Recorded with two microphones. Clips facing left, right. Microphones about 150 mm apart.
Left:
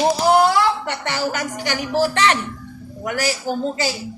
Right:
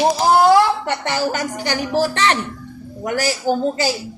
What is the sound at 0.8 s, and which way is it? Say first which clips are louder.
A woman's voice: right 3 dB; 35° right (ahead or behind).